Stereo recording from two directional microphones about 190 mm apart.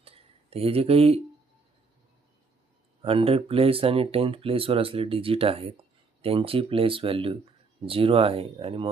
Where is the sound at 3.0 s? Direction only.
30° right (ahead or behind).